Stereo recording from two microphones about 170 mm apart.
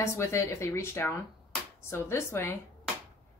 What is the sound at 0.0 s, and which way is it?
Speech, 15° left (ahead or behind).